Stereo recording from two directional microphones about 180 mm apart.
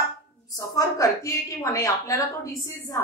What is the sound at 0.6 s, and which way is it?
A woman's voice, 20° left (ahead or behind).